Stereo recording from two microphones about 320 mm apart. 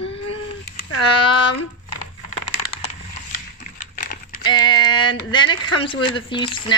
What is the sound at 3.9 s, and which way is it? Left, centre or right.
Typing, left.